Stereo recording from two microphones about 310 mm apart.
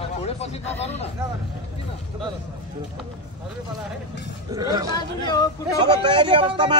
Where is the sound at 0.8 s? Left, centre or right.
Left.